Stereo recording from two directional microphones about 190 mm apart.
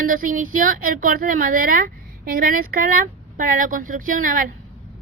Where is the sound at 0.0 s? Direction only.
45° right (ahead or behind).